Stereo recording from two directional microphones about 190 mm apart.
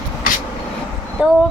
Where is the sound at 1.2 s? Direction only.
5° right (ahead or behind).